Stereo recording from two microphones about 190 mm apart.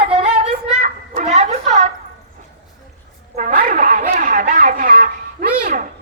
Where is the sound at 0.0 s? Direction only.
30° right (ahead or behind).